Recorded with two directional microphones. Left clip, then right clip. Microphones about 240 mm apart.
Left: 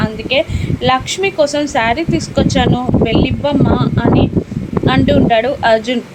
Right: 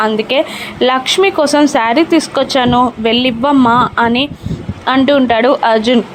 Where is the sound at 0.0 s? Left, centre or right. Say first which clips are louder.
Right 3 dB; right.